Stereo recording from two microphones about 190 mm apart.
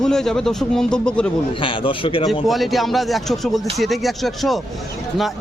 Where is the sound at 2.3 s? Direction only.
Centre (ahead or behind).